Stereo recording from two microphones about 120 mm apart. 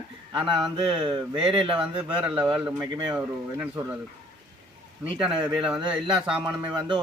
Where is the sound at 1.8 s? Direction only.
10° right (ahead or behind).